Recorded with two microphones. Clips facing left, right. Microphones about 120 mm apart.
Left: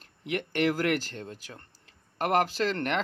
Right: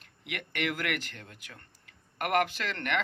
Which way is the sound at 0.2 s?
30° left (ahead or behind).